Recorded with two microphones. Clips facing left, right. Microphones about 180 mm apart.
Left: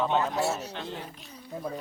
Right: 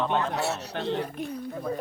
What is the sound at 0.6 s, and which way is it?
Speech, 70° right (ahead or behind).